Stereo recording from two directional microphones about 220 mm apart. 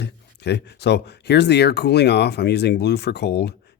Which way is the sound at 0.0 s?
50° left (ahead or behind).